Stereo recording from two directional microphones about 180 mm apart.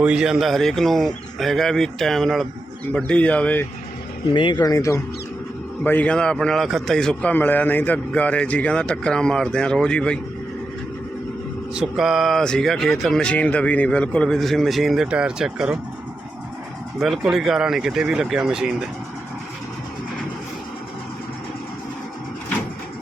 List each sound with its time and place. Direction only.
0.0 s a man's voice: 5° right (ahead or behind)
4.4 s a man's voice: 25° left (ahead or behind); by 10.2 s 5° left (ahead or behind)
11.7 s a man's voice: 5° right (ahead or behind)
17.0 s a man's voice: centre (ahead or behind)